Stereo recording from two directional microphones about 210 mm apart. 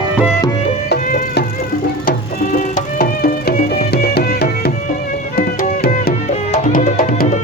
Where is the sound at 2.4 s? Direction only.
40° left (ahead or behind).